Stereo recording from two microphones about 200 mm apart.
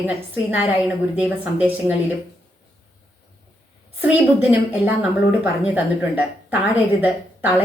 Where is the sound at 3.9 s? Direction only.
10° right (ahead or behind).